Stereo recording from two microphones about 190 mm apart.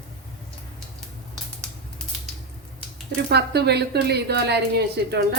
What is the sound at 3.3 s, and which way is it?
A woman's voice, 60° right (ahead or behind).